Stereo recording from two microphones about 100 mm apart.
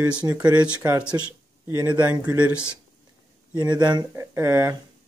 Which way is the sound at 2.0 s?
15° right (ahead or behind).